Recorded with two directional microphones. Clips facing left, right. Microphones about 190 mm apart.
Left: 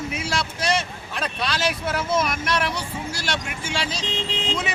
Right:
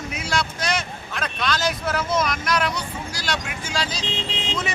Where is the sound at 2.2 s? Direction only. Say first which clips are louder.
Left 1 dB; 5° left (ahead or behind).